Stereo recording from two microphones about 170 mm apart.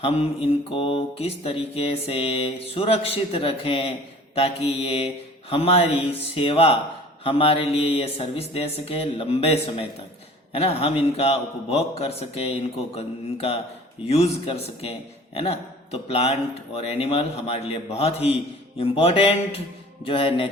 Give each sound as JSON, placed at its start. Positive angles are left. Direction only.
{"t": 0.0, "sound": "mantra", "side_deg": 35}